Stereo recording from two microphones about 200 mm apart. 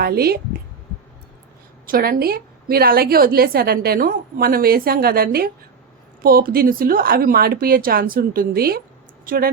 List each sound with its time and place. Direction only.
0.0 s a woman's voice: 50° right (ahead or behind)
1.9 s a woman's voice: 50° right (ahead or behind)